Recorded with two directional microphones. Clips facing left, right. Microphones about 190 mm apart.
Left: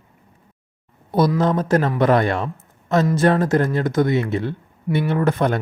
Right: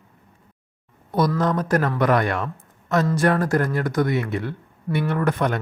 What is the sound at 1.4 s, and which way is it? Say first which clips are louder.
Speech: left 3 dB; 25° left (ahead or behind).